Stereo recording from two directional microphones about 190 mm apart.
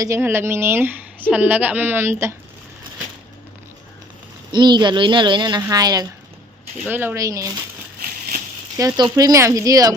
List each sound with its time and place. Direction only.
0.0 s speech: 15° right (ahead or behind)
4.5 s speech: 25° right (ahead or behind)
8.8 s speech: 20° right (ahead or behind)